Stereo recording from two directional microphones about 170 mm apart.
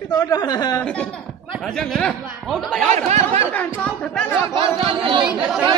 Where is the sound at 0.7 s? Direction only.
5° left (ahead or behind).